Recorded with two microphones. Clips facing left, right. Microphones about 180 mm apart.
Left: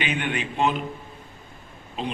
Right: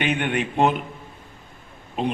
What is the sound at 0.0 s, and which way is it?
Speech, 55° right (ahead or behind).